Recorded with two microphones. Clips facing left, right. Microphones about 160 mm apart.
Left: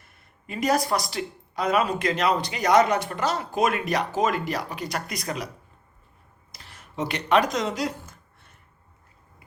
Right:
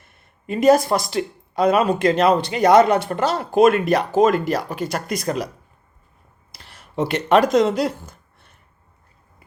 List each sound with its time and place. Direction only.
0.0 s speech: 25° right (ahead or behind)
3.3 s speech: 60° right (ahead or behind); by 5.5 s 45° right (ahead or behind)
6.9 s speech: 55° right (ahead or behind)